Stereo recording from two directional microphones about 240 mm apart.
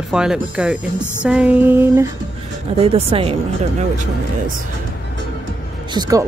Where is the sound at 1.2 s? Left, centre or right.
Centre.